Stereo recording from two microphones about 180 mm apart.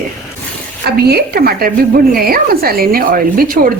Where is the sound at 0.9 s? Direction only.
60° right (ahead or behind).